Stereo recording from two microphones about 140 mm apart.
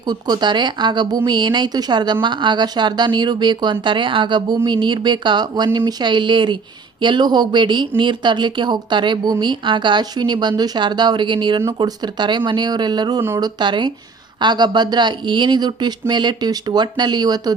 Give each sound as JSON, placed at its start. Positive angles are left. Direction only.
{"t": 0.1, "sound": "speech", "side_deg": -30}